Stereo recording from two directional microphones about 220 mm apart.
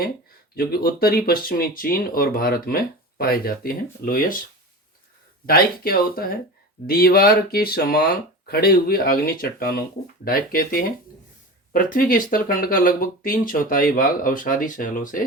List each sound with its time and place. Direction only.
0.5 s speech: 45° left (ahead or behind)
5.5 s speech: 40° left (ahead or behind)